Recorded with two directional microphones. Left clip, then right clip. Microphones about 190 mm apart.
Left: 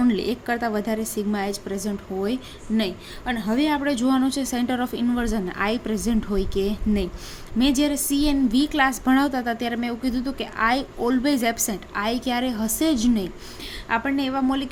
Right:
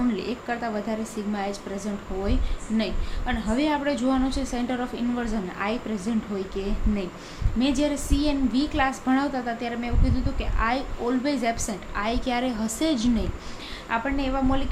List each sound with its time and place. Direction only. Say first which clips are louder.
0.1 s a woman's voice: left 4 dB; 50° left (ahead or behind)